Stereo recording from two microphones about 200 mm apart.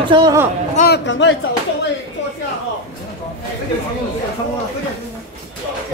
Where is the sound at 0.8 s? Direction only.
60° left (ahead or behind).